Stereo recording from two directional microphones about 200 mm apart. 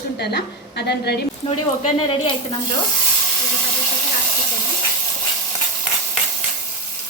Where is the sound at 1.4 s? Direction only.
30° left (ahead or behind).